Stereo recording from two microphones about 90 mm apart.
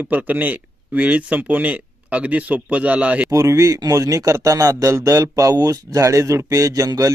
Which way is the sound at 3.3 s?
40° right (ahead or behind).